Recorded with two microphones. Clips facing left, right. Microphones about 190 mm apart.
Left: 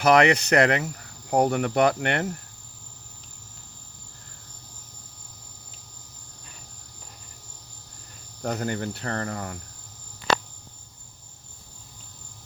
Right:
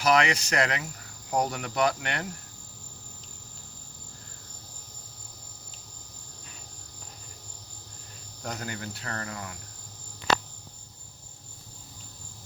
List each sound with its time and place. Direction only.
0.0 s speech: 60° left (ahead or behind)
8.5 s speech: 45° left (ahead or behind)
9.0 s speech: 40° left (ahead or behind)